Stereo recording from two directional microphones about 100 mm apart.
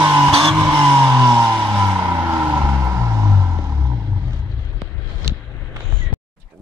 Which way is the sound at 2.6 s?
30° right (ahead or behind).